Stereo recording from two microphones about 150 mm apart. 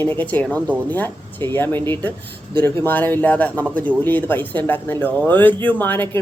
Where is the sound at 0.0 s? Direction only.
15° left (ahead or behind).